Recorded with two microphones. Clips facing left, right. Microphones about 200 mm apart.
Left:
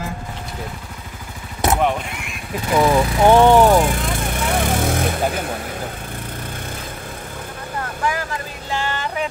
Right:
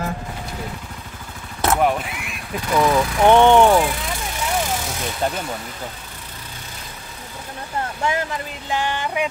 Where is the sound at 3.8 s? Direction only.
50° left (ahead or behind).